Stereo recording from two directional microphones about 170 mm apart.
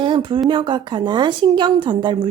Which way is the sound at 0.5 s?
30° right (ahead or behind).